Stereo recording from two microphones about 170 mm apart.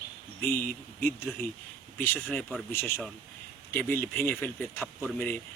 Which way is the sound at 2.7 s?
15° left (ahead or behind).